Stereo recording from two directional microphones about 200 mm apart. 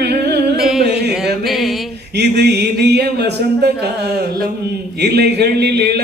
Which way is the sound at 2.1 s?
55° right (ahead or behind).